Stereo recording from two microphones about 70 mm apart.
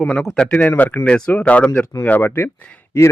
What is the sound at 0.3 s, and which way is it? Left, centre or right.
Speech, left.